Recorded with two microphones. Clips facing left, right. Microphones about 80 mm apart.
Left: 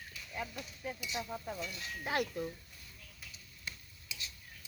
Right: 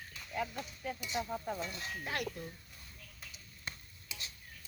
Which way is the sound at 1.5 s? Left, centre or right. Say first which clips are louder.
Right 2 dB; right.